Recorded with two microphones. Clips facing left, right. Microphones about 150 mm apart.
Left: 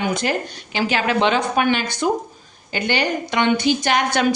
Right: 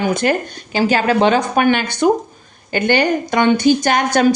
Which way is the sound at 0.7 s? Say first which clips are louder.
Right 5 dB; 40° right (ahead or behind).